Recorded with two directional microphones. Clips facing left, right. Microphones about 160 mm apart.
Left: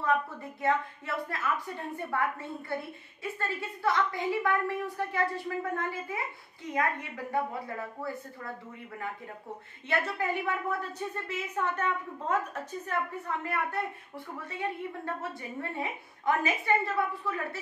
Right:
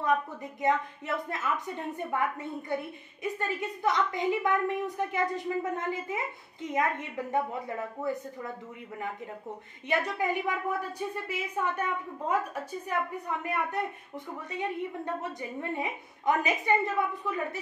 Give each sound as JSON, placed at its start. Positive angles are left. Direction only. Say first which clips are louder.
{"t": 0.0, "sound": "a woman's voice", "louder": "right 1 dB", "side_deg": -15}
{"t": 9.8, "sound": "a woman's voice", "louder": "right 2 dB", "side_deg": -15}
{"t": 15.7, "sound": "a woman's voice", "louder": "right 2 dB", "side_deg": -20}